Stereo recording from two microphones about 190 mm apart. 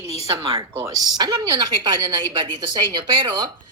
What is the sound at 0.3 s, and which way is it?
Speech, 15° right (ahead or behind).